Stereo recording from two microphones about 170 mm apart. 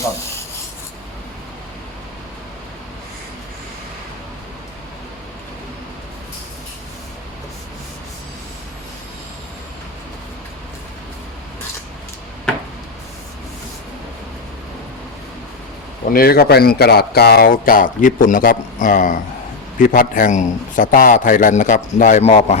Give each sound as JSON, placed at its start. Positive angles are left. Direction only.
{"t": 16.1, "sound": "a man's voice", "side_deg": 65}